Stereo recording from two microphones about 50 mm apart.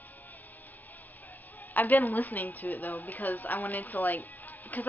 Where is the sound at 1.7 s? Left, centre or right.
Left.